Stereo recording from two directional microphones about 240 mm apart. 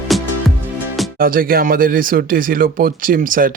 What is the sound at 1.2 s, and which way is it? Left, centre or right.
Speech, right.